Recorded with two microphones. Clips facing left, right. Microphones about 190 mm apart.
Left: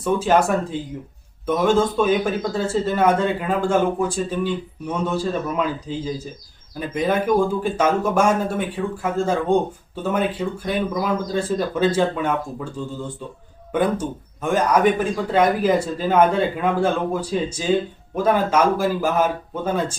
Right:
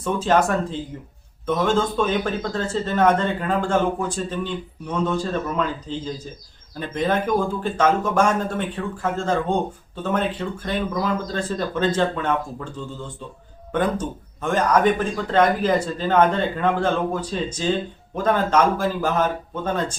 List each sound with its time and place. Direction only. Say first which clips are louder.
0.0 s speech: left 2 dB; 10° left (ahead or behind)
13.7 s speech: left 2 dB; 10° left (ahead or behind)